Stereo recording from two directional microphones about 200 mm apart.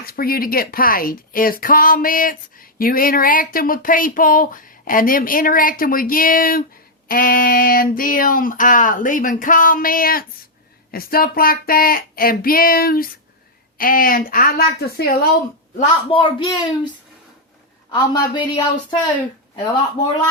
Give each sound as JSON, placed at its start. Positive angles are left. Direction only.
{"t": 0.0, "sound": "speech", "side_deg": 50}
{"t": 15.8, "sound": "speech", "side_deg": 25}
{"t": 17.9, "sound": "speech", "side_deg": 25}